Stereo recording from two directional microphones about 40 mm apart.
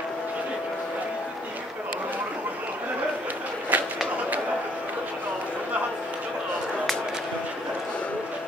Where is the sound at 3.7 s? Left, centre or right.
Right.